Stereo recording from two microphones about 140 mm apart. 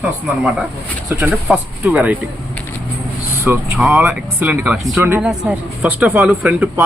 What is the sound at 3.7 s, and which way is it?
Speech, centre (ahead or behind).